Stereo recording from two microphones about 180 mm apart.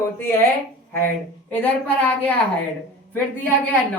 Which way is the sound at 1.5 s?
10° left (ahead or behind).